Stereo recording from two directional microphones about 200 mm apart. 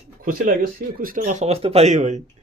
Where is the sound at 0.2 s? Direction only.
45° right (ahead or behind).